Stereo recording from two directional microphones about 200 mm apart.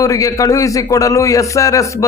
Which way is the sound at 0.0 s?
15° left (ahead or behind).